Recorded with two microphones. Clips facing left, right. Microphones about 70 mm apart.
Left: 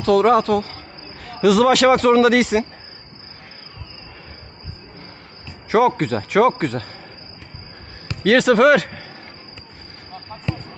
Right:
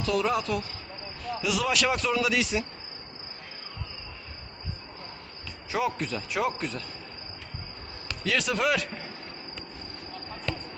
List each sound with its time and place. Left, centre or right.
0.0 s speech: left
5.6 s speech: left
8.2 s speech: left